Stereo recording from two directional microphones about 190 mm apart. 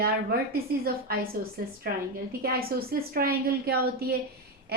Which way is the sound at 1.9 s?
50° right (ahead or behind).